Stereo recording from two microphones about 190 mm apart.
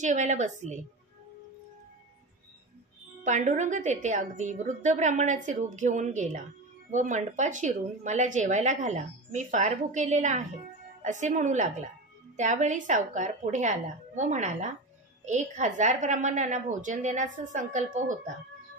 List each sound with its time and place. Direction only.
0.0 s a woman's voice: 40° right (ahead or behind)
3.3 s a woman's voice: 40° right (ahead or behind)